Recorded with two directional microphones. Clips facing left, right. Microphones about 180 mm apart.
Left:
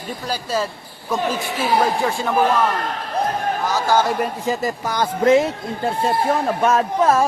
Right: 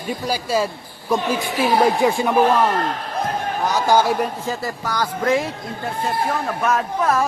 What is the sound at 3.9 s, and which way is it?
Speech, 10° right (ahead or behind).